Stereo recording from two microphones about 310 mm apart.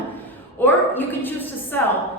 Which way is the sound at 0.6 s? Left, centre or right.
Centre.